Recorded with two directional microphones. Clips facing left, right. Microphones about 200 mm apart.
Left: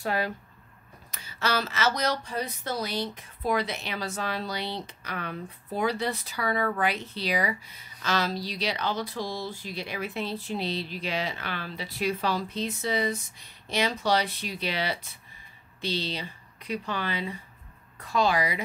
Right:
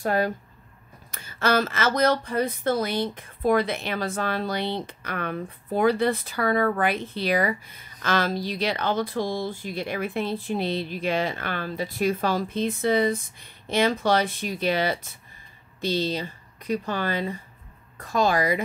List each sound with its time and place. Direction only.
0.0 s speech: 45° right (ahead or behind)